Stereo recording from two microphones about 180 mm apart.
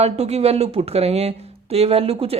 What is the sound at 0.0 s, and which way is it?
Speech, 35° right (ahead or behind).